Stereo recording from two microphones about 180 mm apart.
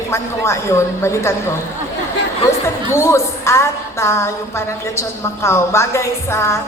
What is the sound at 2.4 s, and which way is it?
A woman's voice, 15° left (ahead or behind).